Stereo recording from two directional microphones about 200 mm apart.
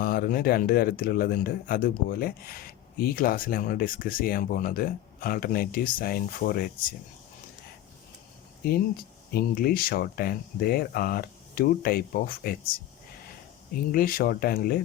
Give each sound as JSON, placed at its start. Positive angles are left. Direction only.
{"t": 0.0, "sound": "speech", "side_deg": 45}
{"t": 9.3, "sound": "speech", "side_deg": 50}
{"t": 13.9, "sound": "speech", "side_deg": 45}